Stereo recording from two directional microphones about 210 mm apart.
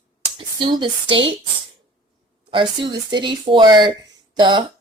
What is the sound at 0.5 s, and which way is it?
Speech, 25° right (ahead or behind).